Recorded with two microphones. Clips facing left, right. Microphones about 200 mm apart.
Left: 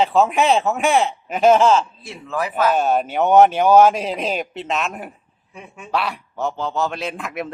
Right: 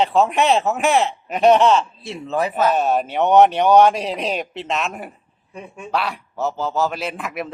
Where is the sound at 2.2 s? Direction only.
25° right (ahead or behind).